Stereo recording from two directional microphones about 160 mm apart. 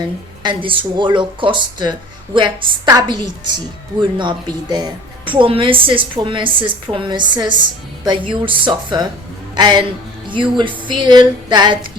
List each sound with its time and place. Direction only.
0.4 s speech: 30° right (ahead or behind)
4.7 s speech: 30° right (ahead or behind)